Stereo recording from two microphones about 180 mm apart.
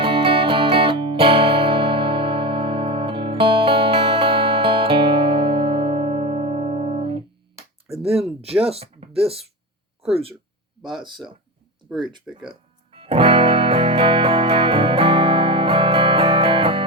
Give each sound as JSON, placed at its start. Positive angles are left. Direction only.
{"t": 0.0, "sound": "music", "side_deg": -30}
{"t": 8.0, "sound": "a sound", "side_deg": 0}
{"t": 8.6, "sound": "speech", "side_deg": -35}
{"t": 11.9, "sound": "speech", "side_deg": 0}
{"t": 12.5, "sound": "music", "side_deg": -30}